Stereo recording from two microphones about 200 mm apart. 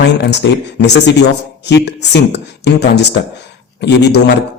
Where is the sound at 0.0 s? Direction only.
60° left (ahead or behind).